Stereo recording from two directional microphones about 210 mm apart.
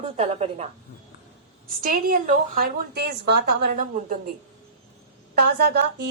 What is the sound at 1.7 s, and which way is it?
A woman's voice, 40° right (ahead or behind).